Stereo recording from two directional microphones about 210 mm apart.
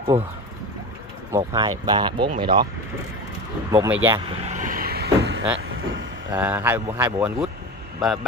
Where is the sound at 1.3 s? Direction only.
20° right (ahead or behind).